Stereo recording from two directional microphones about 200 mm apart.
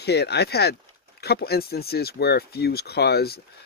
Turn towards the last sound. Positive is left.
turn(degrees=50)  # may be behind; listen again after turning